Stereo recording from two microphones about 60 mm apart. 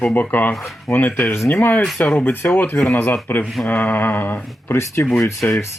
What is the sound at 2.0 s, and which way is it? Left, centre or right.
Speech, left.